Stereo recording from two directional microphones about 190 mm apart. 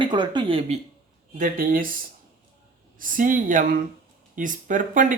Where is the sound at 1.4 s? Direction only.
50° right (ahead or behind).